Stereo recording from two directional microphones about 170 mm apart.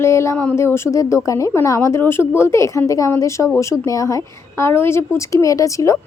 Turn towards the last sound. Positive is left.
turn(degrees=20)  # may be behind; listen again after turning